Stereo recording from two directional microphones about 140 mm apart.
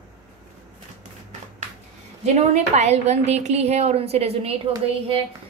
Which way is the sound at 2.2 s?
50° right (ahead or behind).